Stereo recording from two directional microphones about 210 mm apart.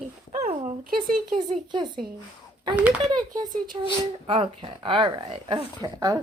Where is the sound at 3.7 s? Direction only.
20° right (ahead or behind).